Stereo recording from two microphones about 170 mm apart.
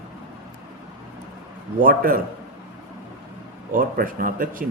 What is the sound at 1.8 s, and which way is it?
Speech, 55° right (ahead or behind).